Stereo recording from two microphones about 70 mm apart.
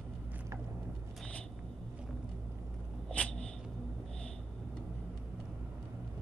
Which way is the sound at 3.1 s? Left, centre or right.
Centre.